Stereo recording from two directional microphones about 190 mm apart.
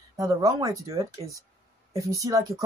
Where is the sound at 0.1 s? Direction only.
20° right (ahead or behind).